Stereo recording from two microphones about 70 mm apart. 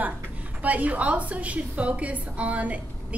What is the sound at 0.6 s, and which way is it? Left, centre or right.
A woman's voice, right.